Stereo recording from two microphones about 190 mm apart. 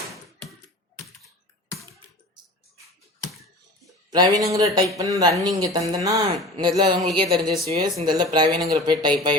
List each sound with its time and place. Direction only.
4.1 s speech: 20° right (ahead or behind)